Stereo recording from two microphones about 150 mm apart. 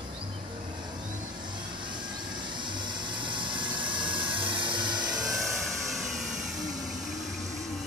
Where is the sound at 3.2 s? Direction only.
30° right (ahead or behind).